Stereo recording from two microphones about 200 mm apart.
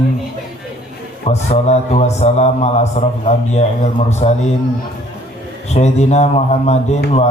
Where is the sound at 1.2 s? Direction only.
35° left (ahead or behind).